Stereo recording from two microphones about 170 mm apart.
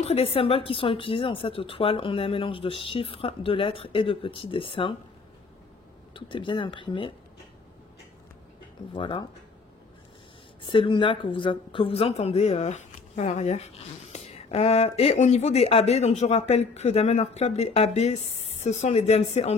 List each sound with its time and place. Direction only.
0.0 s speech: 35° left (ahead or behind)
6.1 s speech: 30° left (ahead or behind)
8.9 s speech: 30° left (ahead or behind)
10.7 s speech: 30° left (ahead or behind)